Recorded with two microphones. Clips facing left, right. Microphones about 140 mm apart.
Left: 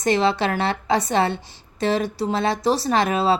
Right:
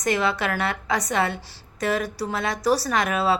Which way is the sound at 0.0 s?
25° left (ahead or behind).